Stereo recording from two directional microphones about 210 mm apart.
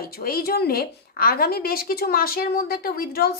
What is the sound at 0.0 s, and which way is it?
A woman's voice, 45° left (ahead or behind).